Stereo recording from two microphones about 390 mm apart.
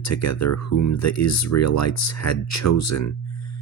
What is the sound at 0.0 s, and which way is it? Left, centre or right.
Speech, left.